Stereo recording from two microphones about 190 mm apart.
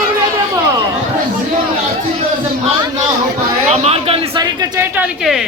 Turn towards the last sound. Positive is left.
turn(degrees=-10)  # may be behind; listen again after turning